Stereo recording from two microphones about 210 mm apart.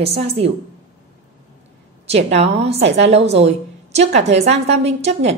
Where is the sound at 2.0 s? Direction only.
30° right (ahead or behind).